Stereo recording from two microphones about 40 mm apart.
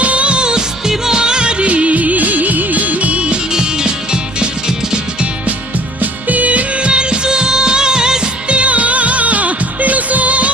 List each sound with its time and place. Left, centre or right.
0.0 s music: right
3.5 s music: centre
6.0 s music: right
6.9 s music: right
8.4 s music: right